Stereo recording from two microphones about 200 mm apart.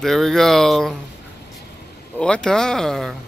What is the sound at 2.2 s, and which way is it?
Speech, 5° left (ahead or behind).